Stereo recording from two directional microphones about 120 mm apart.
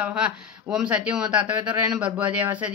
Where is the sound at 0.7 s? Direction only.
10° right (ahead or behind).